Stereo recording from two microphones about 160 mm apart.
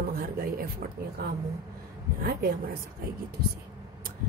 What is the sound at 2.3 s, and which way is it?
Speech, 65° right (ahead or behind).